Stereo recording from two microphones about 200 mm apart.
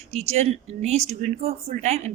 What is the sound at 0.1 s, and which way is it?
A woman's voice, 35° right (ahead or behind).